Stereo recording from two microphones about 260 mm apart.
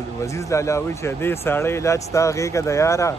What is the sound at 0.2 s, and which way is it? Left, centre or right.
Speech, centre.